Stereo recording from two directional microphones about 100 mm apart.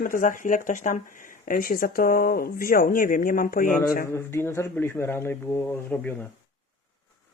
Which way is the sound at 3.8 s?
25° left (ahead or behind).